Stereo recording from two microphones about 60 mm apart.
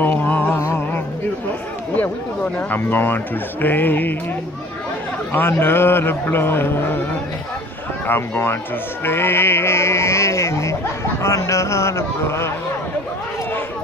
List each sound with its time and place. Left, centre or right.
0.0 s music: left
2.0 s a man's voice: left
5.5 s a man's voice: left
8.1 s a man's voice: left